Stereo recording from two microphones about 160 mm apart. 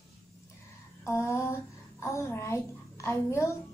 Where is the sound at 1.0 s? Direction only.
15° left (ahead or behind).